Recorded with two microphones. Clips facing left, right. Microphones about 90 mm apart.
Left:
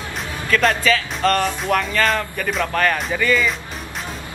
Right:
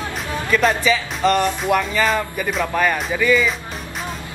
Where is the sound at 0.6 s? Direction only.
10° right (ahead or behind).